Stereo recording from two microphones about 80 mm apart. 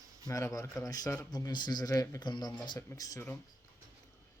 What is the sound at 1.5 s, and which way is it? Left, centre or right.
A man's voice, left.